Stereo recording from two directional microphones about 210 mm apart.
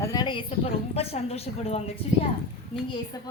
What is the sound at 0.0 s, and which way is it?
A woman's voice, 15° left (ahead or behind).